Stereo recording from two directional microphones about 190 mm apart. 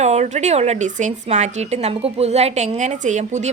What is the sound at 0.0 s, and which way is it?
A woman's voice, 35° right (ahead or behind).